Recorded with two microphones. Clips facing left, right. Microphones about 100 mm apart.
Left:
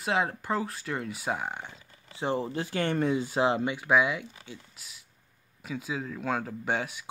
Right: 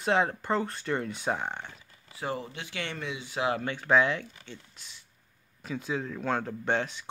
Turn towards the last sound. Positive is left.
turn(degrees=10)  # may be behind; listen again after turning